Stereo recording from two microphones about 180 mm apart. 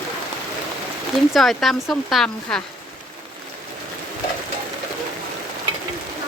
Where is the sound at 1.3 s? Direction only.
Centre (ahead or behind).